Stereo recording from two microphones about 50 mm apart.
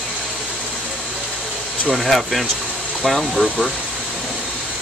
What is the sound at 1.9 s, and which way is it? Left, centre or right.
Speech, centre.